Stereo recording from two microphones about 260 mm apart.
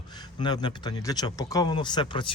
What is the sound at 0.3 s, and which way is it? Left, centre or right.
Speech, centre.